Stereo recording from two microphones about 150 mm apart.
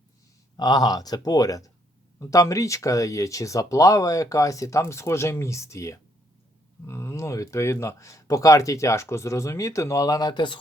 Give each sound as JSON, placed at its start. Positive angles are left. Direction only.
{"t": 0.5, "sound": "speech", "side_deg": 25}